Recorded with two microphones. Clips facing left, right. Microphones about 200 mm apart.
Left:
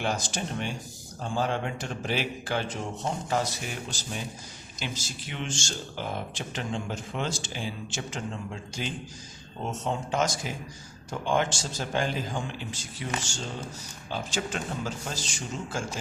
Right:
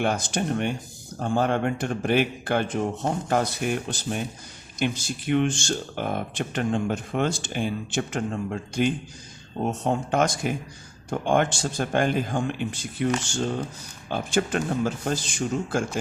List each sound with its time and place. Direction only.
0.0 s speech: 55° right (ahead or behind)